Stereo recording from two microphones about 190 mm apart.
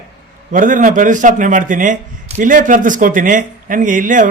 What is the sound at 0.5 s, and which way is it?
Speech, 45° right (ahead or behind).